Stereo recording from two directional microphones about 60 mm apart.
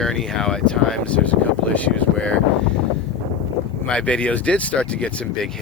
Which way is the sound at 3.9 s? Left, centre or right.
Centre.